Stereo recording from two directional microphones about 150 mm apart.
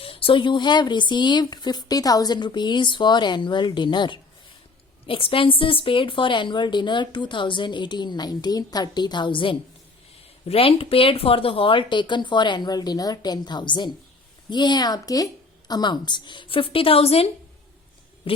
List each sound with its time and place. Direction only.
0.0 s a woman's voice: 35° left (ahead or behind)